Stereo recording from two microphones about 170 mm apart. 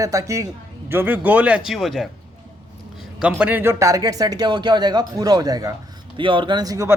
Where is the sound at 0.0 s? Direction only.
20° right (ahead or behind); by 2.0 s centre (ahead or behind).